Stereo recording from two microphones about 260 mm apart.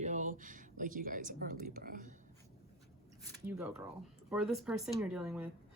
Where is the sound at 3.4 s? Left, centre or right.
Centre.